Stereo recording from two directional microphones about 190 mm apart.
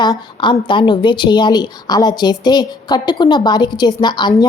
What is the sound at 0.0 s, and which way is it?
Speech, 25° left (ahead or behind).